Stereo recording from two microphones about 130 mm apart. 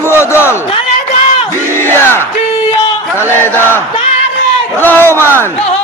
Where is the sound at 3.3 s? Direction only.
15° left (ahead or behind).